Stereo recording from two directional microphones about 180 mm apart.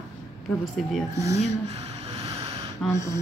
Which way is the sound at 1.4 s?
35° right (ahead or behind).